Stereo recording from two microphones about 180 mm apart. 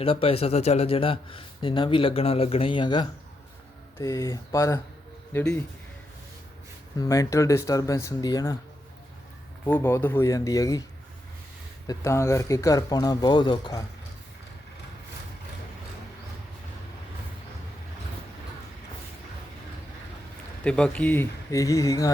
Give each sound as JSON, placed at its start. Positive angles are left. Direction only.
{"t": 0.0, "sound": "a man's voice", "side_deg": 30}
{"t": 6.9, "sound": "speech", "side_deg": 20}
{"t": 9.6, "sound": "speech", "side_deg": 10}
{"t": 11.9, "sound": "speech", "side_deg": 15}
{"t": 20.7, "sound": "speech", "side_deg": 5}